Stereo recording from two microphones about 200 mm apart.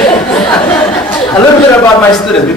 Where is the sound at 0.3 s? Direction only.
5° left (ahead or behind).